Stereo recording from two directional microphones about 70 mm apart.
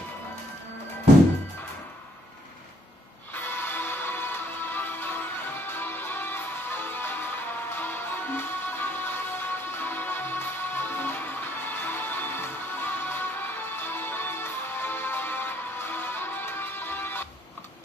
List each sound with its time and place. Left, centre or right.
3.3 s music: left